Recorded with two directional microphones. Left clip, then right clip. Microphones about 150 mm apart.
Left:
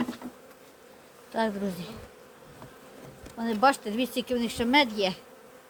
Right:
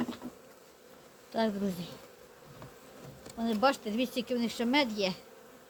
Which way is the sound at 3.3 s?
35° left (ahead or behind).